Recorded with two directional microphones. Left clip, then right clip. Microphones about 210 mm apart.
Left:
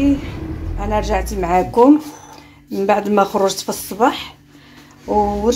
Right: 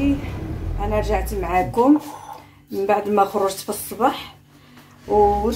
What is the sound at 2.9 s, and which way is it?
Speech, 45° left (ahead or behind).